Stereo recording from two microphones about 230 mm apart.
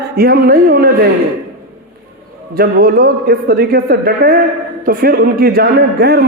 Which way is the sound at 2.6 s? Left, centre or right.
Right.